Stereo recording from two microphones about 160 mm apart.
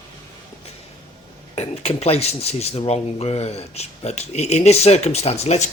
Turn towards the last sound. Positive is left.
turn(degrees=40)  # may be behind; listen again after turning